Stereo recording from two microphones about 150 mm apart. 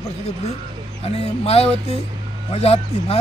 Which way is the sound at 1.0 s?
40° left (ahead or behind).